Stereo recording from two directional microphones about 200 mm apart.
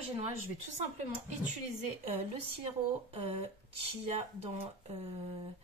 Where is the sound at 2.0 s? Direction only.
30° right (ahead or behind).